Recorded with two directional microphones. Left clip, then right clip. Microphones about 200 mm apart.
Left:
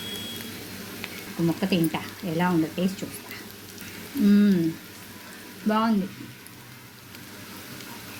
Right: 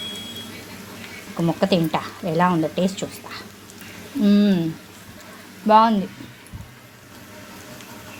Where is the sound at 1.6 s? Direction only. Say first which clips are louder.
Right 8 dB; 25° right (ahead or behind).